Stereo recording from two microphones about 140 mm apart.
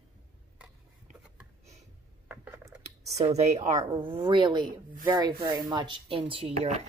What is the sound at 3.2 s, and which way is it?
A woman's voice, 45° right (ahead or behind).